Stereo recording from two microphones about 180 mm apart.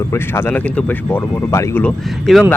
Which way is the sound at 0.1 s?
15° left (ahead or behind).